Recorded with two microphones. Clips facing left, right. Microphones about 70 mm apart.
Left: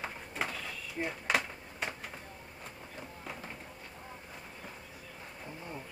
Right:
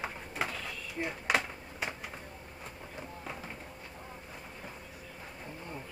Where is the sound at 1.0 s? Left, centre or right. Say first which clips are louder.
Right 1 dB; centre.